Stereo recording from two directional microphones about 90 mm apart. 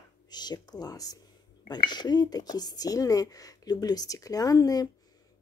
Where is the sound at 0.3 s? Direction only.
50° left (ahead or behind).